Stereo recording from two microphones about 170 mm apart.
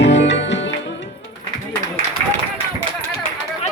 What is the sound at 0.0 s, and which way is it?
Music, 90° left.